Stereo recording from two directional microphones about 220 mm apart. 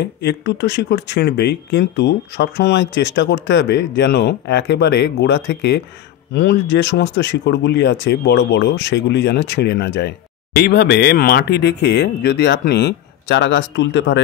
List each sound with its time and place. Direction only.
0.2 s speech: 50° left (ahead or behind)